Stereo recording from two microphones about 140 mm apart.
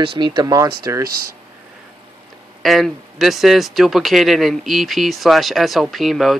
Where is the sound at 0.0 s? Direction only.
35° right (ahead or behind).